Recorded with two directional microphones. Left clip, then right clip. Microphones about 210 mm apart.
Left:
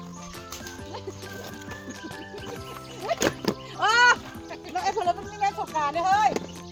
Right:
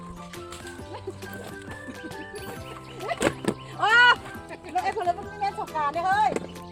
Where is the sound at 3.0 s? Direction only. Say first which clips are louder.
Even; 10° left (ahead or behind).